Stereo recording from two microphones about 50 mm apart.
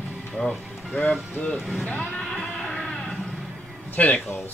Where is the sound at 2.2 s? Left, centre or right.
Centre.